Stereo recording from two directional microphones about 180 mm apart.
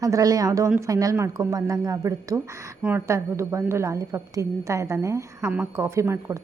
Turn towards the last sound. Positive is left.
turn(degrees=-15)  # may be behind; listen again after turning